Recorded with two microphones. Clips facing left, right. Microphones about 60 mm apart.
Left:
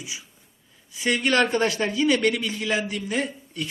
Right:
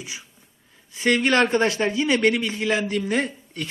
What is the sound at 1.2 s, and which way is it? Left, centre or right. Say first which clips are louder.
A man's voice: even; right.